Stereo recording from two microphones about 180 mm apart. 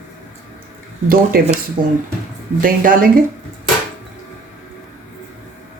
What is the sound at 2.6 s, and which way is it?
Speech, 50° right (ahead or behind).